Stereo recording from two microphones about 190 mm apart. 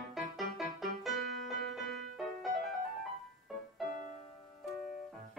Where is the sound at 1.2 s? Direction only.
65° right (ahead or behind).